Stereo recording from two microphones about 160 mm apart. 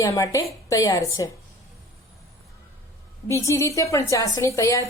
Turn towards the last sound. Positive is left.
turn(degrees=20)  # may be behind; listen again after turning